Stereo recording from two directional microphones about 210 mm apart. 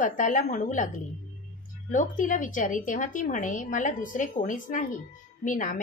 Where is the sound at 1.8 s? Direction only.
40° left (ahead or behind).